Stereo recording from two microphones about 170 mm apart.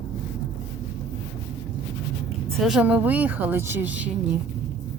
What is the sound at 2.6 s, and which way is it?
Speech, 5° right (ahead or behind).